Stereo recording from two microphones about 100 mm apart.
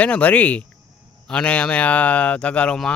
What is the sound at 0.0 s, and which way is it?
Speech, 15° left (ahead or behind).